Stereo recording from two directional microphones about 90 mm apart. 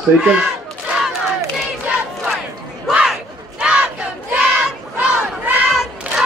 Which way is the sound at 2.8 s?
10° right (ahead or behind).